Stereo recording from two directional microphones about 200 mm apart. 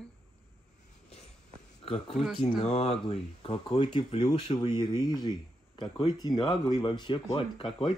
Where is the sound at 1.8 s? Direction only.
30° left (ahead or behind).